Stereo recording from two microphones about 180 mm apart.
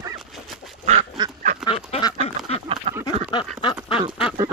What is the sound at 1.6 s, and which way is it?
Duck, 30° left (ahead or behind).